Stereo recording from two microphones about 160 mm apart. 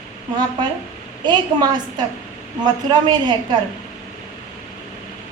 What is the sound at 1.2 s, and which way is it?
A woman's voice, 25° right (ahead or behind).